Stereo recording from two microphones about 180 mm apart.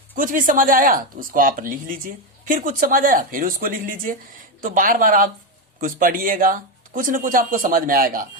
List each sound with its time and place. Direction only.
0.2 s a woman's voice: 50° right (ahead or behind)